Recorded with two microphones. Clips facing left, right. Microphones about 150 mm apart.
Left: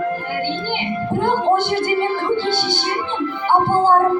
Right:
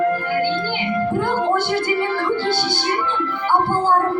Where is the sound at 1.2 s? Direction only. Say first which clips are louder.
Left 7 dB; 20° left (ahead or behind).